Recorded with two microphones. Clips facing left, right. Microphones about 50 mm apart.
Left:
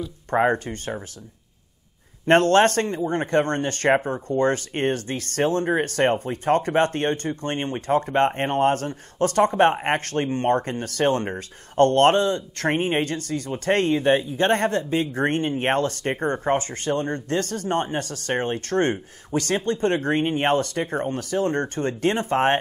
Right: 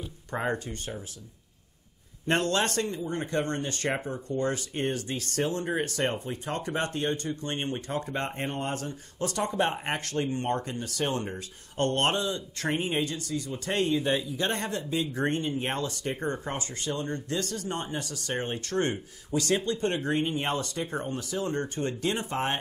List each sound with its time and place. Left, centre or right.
0.3 s speech: left
2.2 s speech: left